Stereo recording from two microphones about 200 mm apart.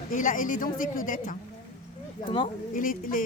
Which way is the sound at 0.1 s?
40° left (ahead or behind).